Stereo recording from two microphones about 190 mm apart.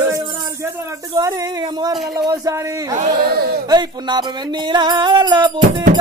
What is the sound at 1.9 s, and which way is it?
Music, 20° right (ahead or behind).